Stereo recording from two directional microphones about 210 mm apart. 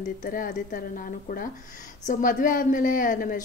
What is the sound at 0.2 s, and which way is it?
A woman's voice, 40° left (ahead or behind).